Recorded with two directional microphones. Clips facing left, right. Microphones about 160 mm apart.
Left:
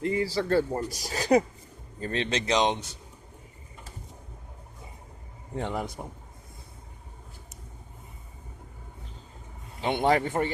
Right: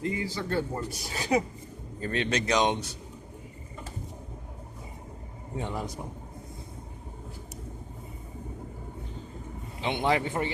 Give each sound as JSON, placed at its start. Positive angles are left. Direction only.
{"t": 0.2, "sound": "speech", "side_deg": 35}
{"t": 5.5, "sound": "a man's voice", "side_deg": 65}
{"t": 9.8, "sound": "a man's voice", "side_deg": 45}